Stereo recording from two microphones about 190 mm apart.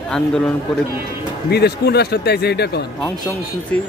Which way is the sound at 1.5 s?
60° left (ahead or behind).